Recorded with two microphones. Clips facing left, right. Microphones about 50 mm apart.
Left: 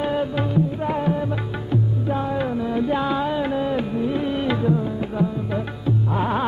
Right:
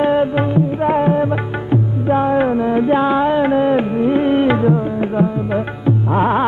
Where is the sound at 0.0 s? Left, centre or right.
Right.